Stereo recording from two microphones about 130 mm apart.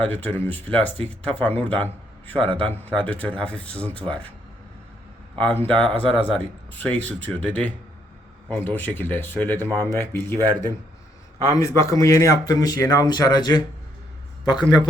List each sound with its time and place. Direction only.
0.0 s speech: 15° left (ahead or behind)
5.6 s speech: 10° left (ahead or behind)
11.5 s a man's voice: 25° left (ahead or behind)